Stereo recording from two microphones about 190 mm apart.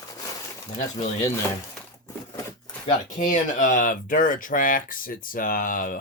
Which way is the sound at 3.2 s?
45° left (ahead or behind).